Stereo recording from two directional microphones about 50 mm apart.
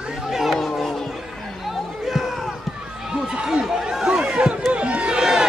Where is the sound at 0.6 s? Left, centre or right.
Centre.